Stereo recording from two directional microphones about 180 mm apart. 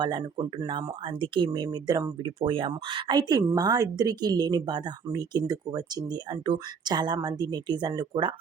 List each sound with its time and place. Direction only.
0.0 s speech: 25° right (ahead or behind)